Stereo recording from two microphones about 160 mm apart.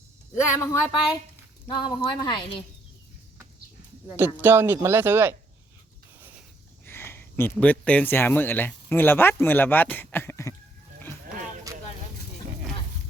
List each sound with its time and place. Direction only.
0.6 s speech: 15° left (ahead or behind)
1.6 s speech: 30° left (ahead or behind)
4.2 s speech: 15° right (ahead or behind)
6.1 s a sound: 10° right (ahead or behind)
6.8 s speech: 15° left (ahead or behind)